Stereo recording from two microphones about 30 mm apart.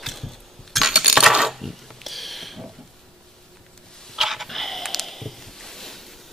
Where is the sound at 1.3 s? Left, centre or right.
Centre.